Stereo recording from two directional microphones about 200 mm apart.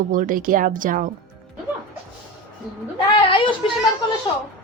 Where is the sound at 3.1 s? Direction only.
25° left (ahead or behind).